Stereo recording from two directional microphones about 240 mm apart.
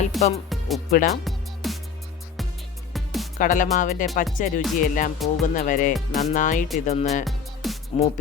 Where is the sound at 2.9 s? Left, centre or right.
Centre.